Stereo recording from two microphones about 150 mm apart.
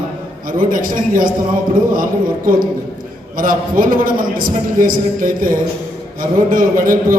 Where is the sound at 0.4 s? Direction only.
65° right (ahead or behind).